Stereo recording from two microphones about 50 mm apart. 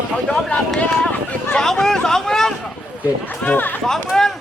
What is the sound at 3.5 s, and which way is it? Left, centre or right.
Speech, left.